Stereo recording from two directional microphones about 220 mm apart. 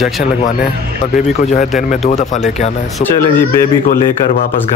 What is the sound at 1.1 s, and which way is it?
Speech, 30° left (ahead or behind).